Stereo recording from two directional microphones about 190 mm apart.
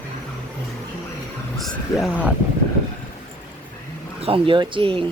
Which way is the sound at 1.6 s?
Centre (ahead or behind).